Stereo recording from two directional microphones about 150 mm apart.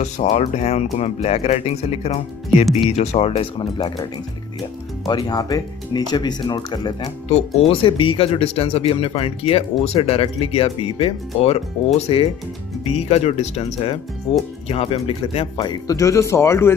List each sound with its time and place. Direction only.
0.0 s speech: 50° left (ahead or behind); by 3.9 s 35° left (ahead or behind)
5.0 s speech: 25° left (ahead or behind)
7.2 s speech: 45° left (ahead or behind); by 16.7 s 15° left (ahead or behind)